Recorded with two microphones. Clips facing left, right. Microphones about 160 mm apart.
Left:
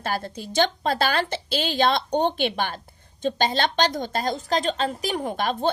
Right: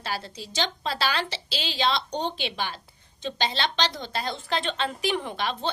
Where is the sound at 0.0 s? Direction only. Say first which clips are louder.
Left 5 dB; 50° left (ahead or behind).